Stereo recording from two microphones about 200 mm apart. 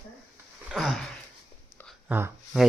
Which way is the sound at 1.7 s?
5° left (ahead or behind).